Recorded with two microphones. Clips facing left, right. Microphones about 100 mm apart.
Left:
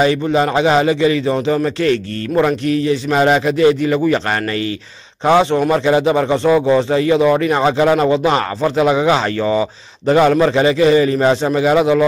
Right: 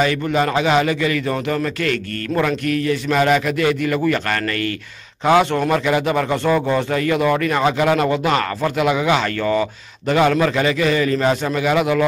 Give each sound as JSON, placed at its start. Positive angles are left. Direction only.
{"t": 0.0, "sound": "speech", "side_deg": 30}
{"t": 9.4, "sound": "speech", "side_deg": 15}
{"t": 10.0, "sound": "a man's voice", "side_deg": 30}